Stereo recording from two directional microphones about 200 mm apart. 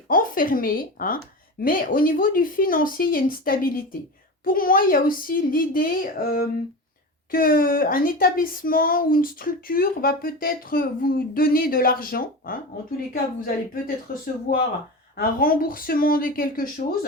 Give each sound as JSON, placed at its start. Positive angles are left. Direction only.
{"t": 0.1, "sound": "a woman's voice", "side_deg": 45}